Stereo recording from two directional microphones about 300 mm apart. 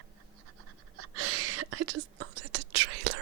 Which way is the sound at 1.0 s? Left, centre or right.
Right.